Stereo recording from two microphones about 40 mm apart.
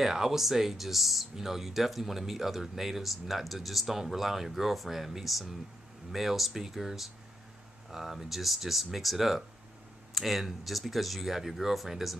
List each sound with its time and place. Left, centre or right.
0.0 s speech: centre